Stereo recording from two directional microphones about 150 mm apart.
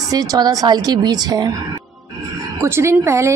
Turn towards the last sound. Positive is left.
turn(degrees=-20)  # may be behind; listen again after turning